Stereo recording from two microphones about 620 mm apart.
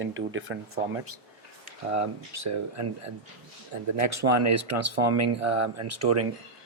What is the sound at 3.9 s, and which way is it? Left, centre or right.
Speech, right.